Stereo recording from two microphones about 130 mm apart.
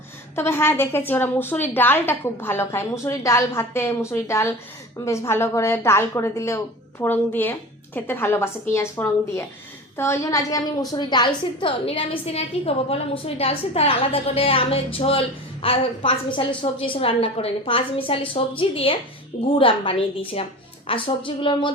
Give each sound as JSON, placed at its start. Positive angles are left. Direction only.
{"t": 0.3, "sound": "a woman's voice", "side_deg": 20}
{"t": 20.9, "sound": "a woman's voice", "side_deg": 45}
{"t": 21.2, "sound": "a sound", "side_deg": 40}